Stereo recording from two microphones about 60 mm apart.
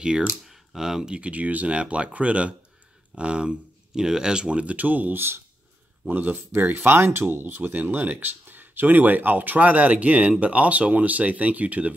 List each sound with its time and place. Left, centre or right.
0.0 s speech: centre
1.1 s speech: right